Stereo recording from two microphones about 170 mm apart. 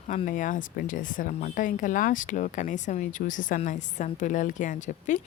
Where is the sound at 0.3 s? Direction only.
50° left (ahead or behind).